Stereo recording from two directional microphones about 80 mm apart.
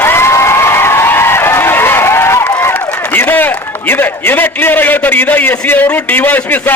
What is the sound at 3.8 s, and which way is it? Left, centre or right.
A man's voice, left.